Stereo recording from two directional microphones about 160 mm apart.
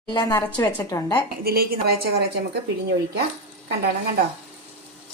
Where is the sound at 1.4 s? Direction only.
70° right (ahead or behind).